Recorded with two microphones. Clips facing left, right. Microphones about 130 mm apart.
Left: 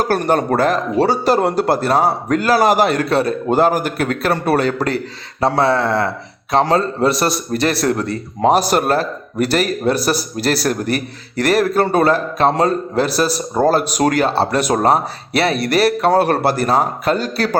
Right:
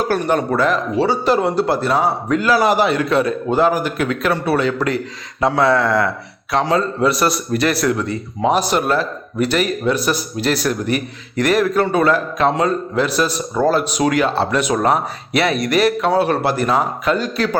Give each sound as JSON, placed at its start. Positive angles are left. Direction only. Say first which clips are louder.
{"t": 0.0, "sound": "a man's voice", "louder": "left 1 dB", "side_deg": 40}
{"t": 5.4, "sound": "a sound", "louder": "even", "side_deg": 35}
{"t": 6.5, "sound": "a man's voice", "louder": "left 2 dB", "side_deg": 35}
{"t": 7.9, "sound": "a man's voice", "louder": "left 1 dB", "side_deg": 45}